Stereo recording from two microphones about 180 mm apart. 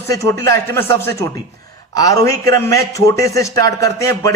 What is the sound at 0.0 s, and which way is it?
A man's voice, 15° left (ahead or behind).